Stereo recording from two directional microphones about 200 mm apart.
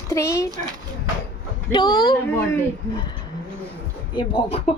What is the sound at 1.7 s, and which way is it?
Speech, 20° left (ahead or behind).